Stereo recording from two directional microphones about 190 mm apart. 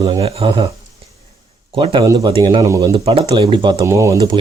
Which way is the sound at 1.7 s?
25° right (ahead or behind).